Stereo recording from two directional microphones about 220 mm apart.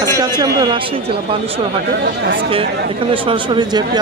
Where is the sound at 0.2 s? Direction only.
20° right (ahead or behind).